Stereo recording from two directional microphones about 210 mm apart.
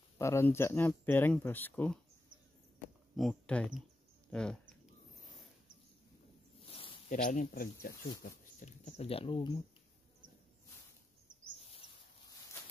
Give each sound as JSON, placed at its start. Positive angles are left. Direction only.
{"t": 0.2, "sound": "speech", "side_deg": 15}
{"t": 3.2, "sound": "speech", "side_deg": 5}
{"t": 4.3, "sound": "a sound", "side_deg": 5}
{"t": 6.7, "sound": "speech", "side_deg": 30}